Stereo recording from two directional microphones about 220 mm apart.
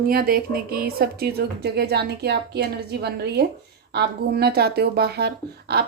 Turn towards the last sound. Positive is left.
turn(degrees=-45)  # may be behind; listen again after turning